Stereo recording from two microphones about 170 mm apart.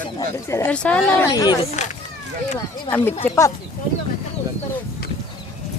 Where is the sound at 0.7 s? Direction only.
5° left (ahead or behind).